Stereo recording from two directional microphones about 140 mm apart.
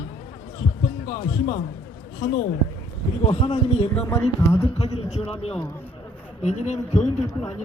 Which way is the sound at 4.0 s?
20° left (ahead or behind).